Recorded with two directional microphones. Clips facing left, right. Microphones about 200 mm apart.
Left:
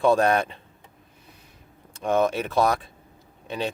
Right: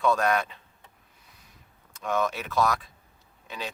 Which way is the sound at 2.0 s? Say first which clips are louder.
Left 6 dB; 30° left (ahead or behind).